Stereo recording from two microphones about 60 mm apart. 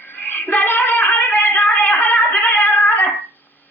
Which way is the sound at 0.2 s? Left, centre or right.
Left.